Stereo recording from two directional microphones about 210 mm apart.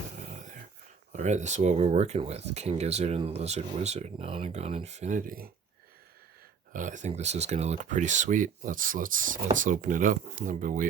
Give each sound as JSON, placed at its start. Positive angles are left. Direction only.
{"t": 1.1, "sound": "speech", "side_deg": -35}
{"t": 6.7, "sound": "speech", "side_deg": -35}